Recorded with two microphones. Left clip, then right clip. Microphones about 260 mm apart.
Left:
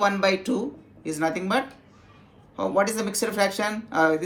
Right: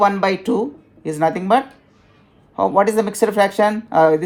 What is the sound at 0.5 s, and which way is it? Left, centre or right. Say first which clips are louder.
Speech: right 8 dB; right.